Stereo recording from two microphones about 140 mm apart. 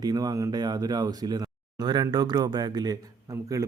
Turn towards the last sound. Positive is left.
turn(degrees=-25)  # may be behind; listen again after turning